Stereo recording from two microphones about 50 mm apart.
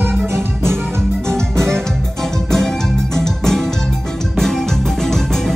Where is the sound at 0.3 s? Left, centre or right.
Right.